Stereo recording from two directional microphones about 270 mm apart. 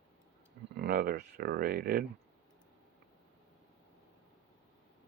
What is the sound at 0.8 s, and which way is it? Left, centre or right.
Speech, right.